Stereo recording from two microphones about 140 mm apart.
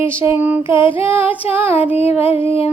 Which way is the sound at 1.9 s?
45° left (ahead or behind).